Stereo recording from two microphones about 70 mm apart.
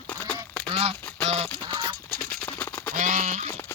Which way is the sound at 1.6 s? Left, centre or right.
Right.